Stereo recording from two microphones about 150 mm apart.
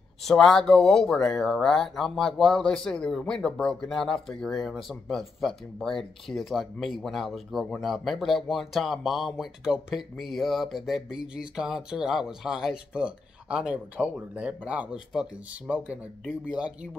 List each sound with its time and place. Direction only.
0.2 s speech: centre (ahead or behind)